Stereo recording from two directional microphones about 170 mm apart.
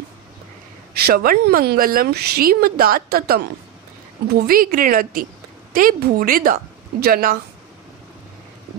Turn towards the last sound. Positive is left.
turn(degrees=-60)  # may be behind; listen again after turning